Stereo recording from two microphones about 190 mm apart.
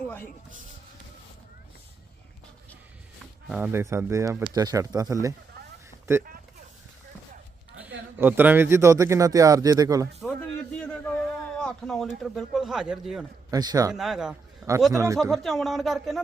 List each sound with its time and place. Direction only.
0.0 s a sound: 10° left (ahead or behind)
3.5 s a man's voice: 10° right (ahead or behind)
7.8 s a man's voice: 10° right (ahead or behind)
10.2 s a sound: centre (ahead or behind)
13.5 s a man's voice: 20° right (ahead or behind)
13.9 s a man's voice: centre (ahead or behind)
14.9 s a man's voice: 15° right (ahead or behind)
15.2 s speech: centre (ahead or behind)